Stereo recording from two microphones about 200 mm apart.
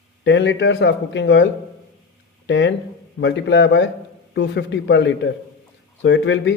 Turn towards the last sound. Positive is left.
turn(degrees=65)  # may be behind; listen again after turning